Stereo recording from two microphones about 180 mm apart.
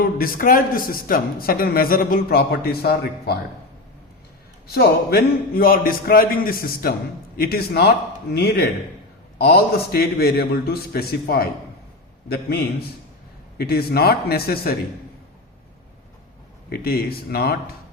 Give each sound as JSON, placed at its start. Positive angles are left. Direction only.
{"t": 0.0, "sound": "a man's voice", "side_deg": 50}
{"t": 4.7, "sound": "a man's voice", "side_deg": 60}
{"t": 16.6, "sound": "a man's voice", "side_deg": 60}